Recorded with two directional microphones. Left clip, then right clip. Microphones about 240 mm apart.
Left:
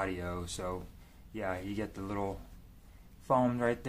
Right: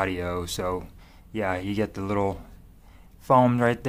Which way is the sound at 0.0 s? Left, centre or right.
Right.